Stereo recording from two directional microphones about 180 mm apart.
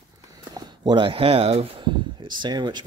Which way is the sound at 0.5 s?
20° right (ahead or behind).